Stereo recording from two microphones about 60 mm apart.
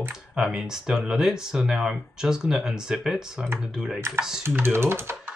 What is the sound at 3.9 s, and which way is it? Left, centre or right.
Speech, right.